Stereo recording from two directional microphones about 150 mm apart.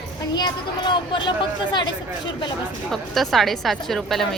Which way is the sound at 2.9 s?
Centre (ahead or behind).